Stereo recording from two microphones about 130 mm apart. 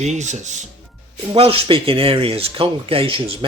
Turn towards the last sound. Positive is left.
turn(degrees=-45)  # may be behind; listen again after turning